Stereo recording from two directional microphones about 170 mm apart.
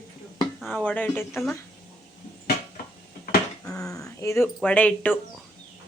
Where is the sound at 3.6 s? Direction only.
5° left (ahead or behind).